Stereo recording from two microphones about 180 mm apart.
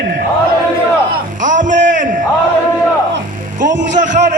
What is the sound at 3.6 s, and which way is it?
Music, 45° right (ahead or behind).